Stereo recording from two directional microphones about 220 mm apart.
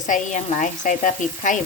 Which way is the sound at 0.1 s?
35° left (ahead or behind).